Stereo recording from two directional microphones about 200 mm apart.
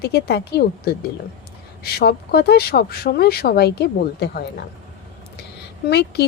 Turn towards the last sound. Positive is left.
turn(degrees=55)  # may be behind; listen again after turning